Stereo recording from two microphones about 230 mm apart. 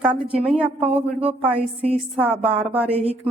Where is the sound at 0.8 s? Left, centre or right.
Right.